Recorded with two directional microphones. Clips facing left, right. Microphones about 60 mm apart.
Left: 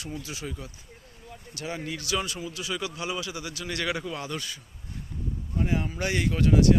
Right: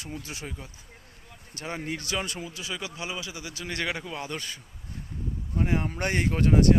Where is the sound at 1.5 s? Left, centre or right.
Right.